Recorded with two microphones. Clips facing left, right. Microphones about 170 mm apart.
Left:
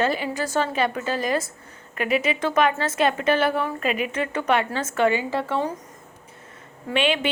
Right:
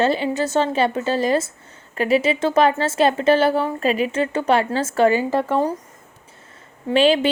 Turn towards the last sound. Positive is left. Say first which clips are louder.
# right 7 dB
turn(degrees=-35)  # may be behind; listen again after turning